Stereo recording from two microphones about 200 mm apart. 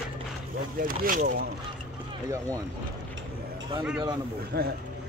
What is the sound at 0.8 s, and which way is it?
Speech, 45° right (ahead or behind).